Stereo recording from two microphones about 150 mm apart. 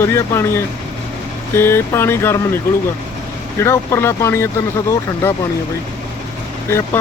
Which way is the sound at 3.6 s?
15° left (ahead or behind).